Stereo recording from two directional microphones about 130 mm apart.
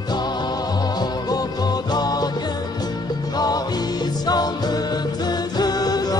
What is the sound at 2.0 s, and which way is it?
Music, 30° left (ahead or behind).